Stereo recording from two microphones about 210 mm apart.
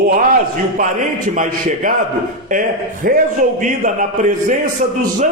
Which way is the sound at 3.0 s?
45° right (ahead or behind).